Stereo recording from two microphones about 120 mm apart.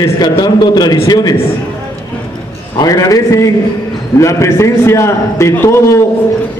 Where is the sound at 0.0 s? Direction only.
35° left (ahead or behind).